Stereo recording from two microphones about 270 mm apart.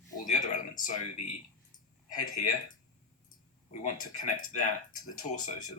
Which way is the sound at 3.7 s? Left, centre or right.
Left.